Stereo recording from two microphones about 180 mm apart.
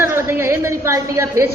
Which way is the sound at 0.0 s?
15° right (ahead or behind).